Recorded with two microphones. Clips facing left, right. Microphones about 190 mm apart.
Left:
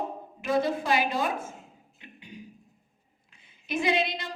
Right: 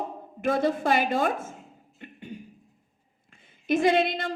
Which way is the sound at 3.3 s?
50° right (ahead or behind).